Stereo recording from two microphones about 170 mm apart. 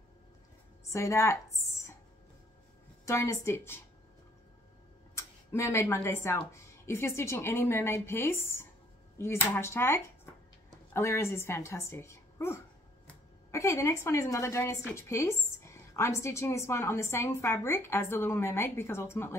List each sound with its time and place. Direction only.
0.9 s speech: 15° left (ahead or behind)
3.1 s a woman's voice: 15° left (ahead or behind)
5.1 s a woman's voice: 15° left (ahead or behind)